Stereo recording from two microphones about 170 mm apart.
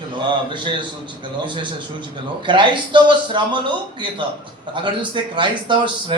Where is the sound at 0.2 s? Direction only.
30° right (ahead or behind).